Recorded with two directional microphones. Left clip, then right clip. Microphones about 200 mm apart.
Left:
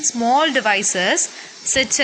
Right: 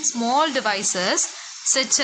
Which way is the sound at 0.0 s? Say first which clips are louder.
Left 4 dB; 10° left (ahead or behind).